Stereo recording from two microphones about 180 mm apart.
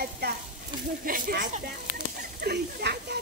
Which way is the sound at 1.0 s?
50° right (ahead or behind).